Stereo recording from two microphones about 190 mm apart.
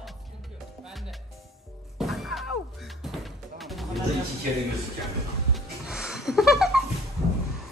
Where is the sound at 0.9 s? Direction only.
Centre (ahead or behind).